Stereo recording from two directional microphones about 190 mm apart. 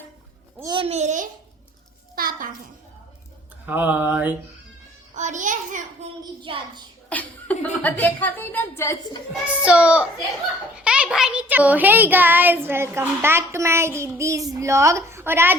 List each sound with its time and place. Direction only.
0.6 s a child's voice: 25° right (ahead or behind)
2.1 s a sound: 50° right (ahead or behind)
3.7 s a child's voice: 10° right (ahead or behind)
5.1 s a sound: 40° right (ahead or behind)
6.4 s a child's voice: 25° right (ahead or behind)
7.1 s speech: 10° left (ahead or behind)
9.6 s a child's voice: 5° right (ahead or behind)